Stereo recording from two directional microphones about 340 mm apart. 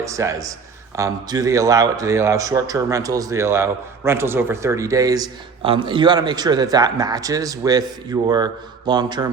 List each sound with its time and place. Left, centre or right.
0.0 s a man's voice: centre